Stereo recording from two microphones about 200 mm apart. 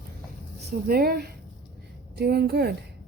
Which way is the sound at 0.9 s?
50° right (ahead or behind).